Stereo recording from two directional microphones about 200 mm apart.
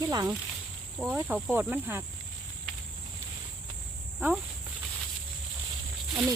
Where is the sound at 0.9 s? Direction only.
5° right (ahead or behind).